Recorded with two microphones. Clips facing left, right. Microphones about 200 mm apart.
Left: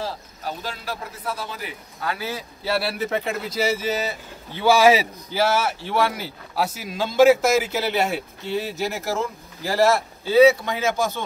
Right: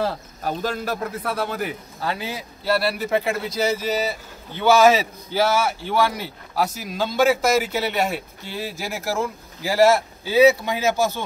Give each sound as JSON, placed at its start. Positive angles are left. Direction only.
{"t": 0.0, "sound": "a man's voice", "side_deg": -55}
{"t": 2.0, "sound": "speech", "side_deg": -30}
{"t": 2.6, "sound": "a man's voice", "side_deg": 0}